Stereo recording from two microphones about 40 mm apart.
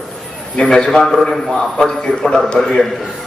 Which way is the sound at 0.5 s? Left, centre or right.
Centre.